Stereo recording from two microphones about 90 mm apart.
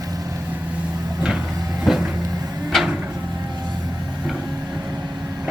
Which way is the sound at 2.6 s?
5° right (ahead or behind).